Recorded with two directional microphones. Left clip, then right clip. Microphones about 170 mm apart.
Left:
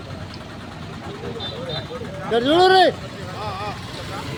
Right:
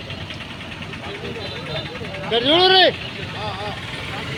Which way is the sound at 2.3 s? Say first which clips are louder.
Even; 65° left (ahead or behind).